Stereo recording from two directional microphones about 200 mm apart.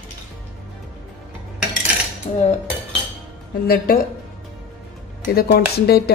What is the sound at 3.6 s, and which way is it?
Speech, 50° left (ahead or behind).